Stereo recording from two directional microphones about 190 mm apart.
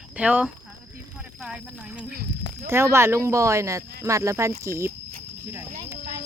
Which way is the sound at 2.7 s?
15° right (ahead or behind).